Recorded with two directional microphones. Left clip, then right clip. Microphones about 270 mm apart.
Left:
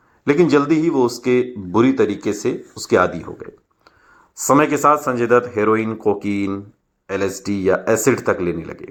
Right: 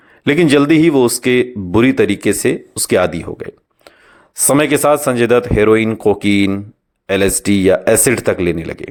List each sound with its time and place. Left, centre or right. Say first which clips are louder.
0.3 s speech: right 4 dB; right